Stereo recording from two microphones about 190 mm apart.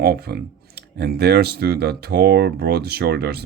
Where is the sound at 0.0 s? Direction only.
55° right (ahead or behind).